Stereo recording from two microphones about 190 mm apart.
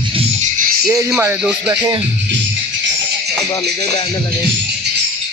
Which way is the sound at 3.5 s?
20° left (ahead or behind).